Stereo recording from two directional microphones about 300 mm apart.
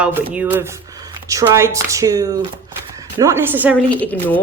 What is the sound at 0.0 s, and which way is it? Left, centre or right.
Speech, centre.